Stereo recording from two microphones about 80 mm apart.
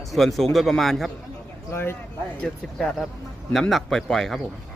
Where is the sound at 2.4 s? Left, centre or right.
Centre.